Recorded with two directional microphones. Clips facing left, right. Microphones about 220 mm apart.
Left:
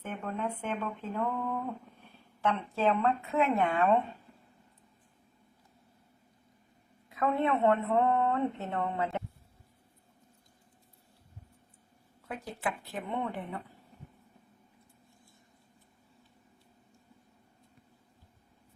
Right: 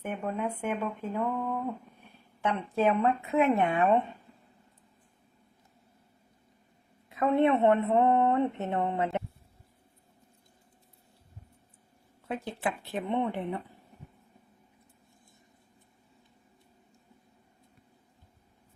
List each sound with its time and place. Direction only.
0.0 s speech: 15° right (ahead or behind)
7.2 s speech: 25° right (ahead or behind)
12.3 s speech: 25° right (ahead or behind)